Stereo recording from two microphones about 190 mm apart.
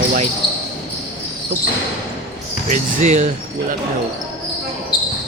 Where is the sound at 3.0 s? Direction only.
35° right (ahead or behind).